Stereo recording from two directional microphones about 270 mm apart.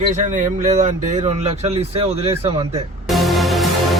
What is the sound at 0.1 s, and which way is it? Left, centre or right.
Speech, right.